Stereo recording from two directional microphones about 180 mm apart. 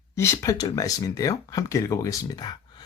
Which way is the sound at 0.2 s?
15° left (ahead or behind).